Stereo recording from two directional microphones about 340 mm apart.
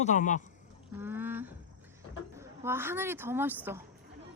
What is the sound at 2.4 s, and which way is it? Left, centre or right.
A woman's voice, centre.